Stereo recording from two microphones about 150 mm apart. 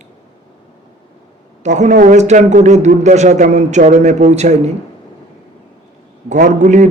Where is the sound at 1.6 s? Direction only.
50° right (ahead or behind).